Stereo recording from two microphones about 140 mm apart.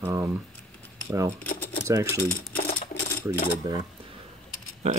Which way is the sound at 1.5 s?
90° left.